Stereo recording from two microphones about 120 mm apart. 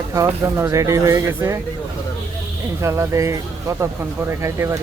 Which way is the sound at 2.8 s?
25° right (ahead or behind).